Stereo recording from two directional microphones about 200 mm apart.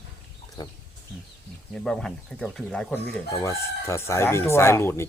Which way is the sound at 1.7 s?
5° left (ahead or behind).